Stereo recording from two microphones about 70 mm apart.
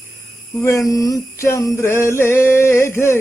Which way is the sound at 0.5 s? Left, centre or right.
Left.